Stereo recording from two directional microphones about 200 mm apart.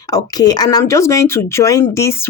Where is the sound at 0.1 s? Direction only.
20° left (ahead or behind).